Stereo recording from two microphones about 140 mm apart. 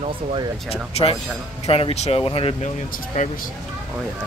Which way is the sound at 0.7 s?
45° left (ahead or behind).